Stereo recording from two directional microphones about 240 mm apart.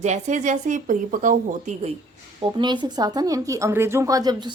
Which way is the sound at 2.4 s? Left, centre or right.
Centre.